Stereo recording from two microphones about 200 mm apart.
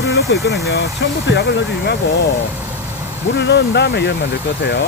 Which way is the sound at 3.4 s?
55° left (ahead or behind).